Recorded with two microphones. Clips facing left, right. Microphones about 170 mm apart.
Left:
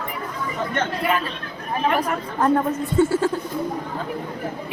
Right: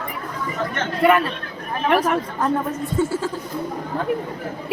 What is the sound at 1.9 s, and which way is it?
Speech, 90° right.